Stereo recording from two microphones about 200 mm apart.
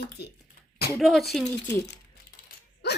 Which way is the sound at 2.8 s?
55° left (ahead or behind).